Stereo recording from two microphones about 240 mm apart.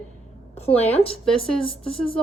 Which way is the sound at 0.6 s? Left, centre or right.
Left.